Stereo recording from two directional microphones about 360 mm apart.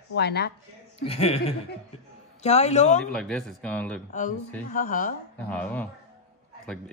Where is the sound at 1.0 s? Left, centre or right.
Centre.